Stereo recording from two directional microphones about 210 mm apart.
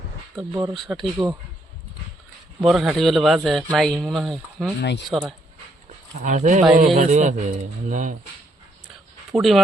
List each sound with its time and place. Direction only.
0.7 s speech: centre (ahead or behind)
2.6 s speech: centre (ahead or behind)
4.8 s speech: 55° left (ahead or behind)
5.0 s speech: centre (ahead or behind)
6.2 s a man's voice: 35° right (ahead or behind)
9.3 s speech: centre (ahead or behind)